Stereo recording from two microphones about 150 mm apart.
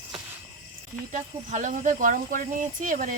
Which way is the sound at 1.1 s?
55° right (ahead or behind).